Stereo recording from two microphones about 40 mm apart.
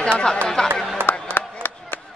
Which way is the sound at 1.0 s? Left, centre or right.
Right.